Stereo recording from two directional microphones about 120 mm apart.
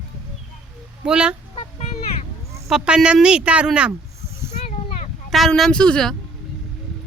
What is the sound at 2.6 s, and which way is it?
Speech, 5° right (ahead or behind).